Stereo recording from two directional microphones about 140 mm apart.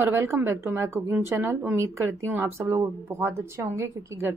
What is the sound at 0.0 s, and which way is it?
A woman's voice, 15° right (ahead or behind).